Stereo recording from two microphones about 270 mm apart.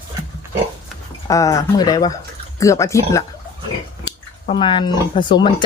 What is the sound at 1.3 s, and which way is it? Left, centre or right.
Speech, centre.